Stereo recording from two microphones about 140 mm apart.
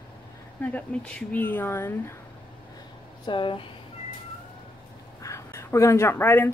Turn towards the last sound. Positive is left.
turn(degrees=15)  # may be behind; listen again after turning